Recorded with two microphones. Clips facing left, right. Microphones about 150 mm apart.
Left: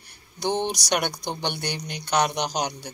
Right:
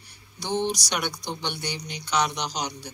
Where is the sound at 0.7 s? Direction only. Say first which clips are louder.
Left 3 dB; 55° left (ahead or behind).